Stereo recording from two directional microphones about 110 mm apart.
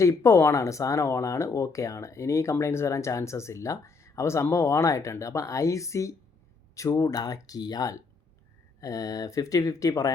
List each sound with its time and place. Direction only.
0.0 s speech: 25° left (ahead or behind)